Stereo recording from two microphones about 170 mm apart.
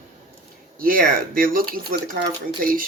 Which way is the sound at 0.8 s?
55° right (ahead or behind).